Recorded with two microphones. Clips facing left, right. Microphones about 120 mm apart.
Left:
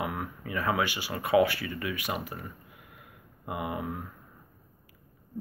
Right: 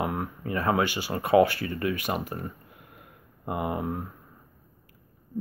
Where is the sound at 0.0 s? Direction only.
35° right (ahead or behind).